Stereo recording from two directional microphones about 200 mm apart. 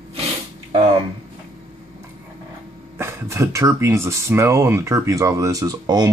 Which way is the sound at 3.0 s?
15° right (ahead or behind).